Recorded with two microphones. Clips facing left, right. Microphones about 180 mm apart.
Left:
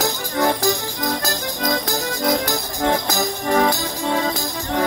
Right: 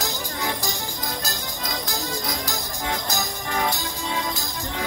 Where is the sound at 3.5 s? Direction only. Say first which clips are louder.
Left 8 dB; 70° left (ahead or behind).